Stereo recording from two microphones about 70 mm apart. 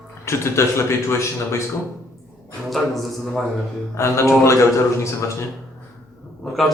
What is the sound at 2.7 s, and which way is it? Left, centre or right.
Speech, centre.